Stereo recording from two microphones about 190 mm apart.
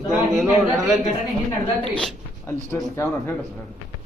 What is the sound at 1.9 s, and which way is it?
Speech, 10° left (ahead or behind).